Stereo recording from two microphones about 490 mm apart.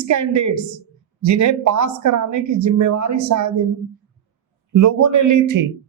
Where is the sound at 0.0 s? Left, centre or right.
Right.